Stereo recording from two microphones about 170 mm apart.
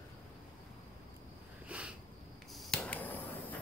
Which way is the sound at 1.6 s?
5° right (ahead or behind).